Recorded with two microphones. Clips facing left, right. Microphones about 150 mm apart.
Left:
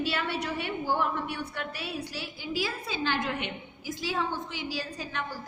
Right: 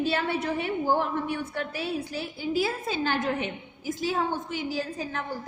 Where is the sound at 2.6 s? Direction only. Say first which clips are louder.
Right 3 dB; 45° right (ahead or behind).